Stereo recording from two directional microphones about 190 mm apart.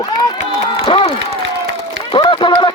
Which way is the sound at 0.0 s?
20° left (ahead or behind).